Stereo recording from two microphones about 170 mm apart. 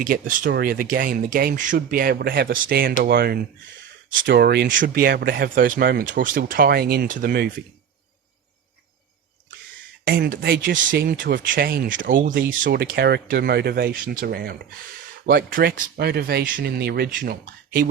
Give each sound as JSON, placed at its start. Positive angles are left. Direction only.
{"t": 0.0, "sound": "speech", "side_deg": -55}
{"t": 10.0, "sound": "speech", "side_deg": -65}
{"t": 12.6, "sound": "speech", "side_deg": -75}